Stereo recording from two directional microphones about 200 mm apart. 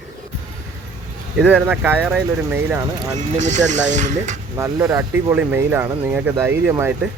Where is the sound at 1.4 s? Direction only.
5° right (ahead or behind).